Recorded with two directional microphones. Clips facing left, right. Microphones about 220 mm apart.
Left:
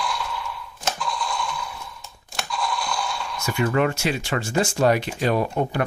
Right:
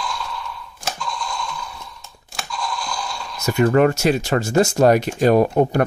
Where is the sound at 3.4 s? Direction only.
40° right (ahead or behind).